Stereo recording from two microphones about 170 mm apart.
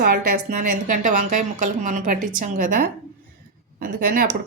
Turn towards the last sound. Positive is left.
turn(degrees=-60)  # may be behind; listen again after turning